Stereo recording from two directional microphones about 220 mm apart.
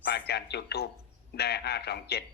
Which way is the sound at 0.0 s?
45° left (ahead or behind).